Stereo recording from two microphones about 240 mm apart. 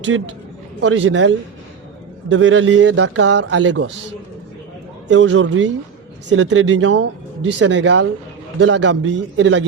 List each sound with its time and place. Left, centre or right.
0.1 s a man's voice: right
2.3 s a man's voice: right
5.0 s a man's voice: right